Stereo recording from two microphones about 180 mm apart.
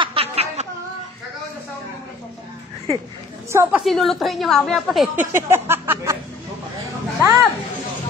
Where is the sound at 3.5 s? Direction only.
15° right (ahead or behind).